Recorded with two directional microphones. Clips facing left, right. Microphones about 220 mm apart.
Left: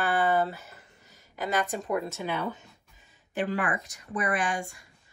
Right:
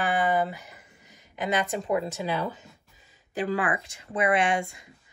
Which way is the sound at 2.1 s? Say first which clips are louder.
Right 3 dB; 35° right (ahead or behind).